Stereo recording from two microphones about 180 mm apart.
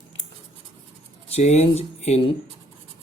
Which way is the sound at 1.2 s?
35° left (ahead or behind).